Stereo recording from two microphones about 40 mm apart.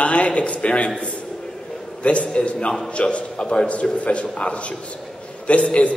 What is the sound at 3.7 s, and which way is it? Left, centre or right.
A man's voice, left.